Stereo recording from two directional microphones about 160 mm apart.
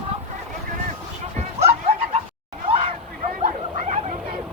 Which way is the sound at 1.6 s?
40° right (ahead or behind).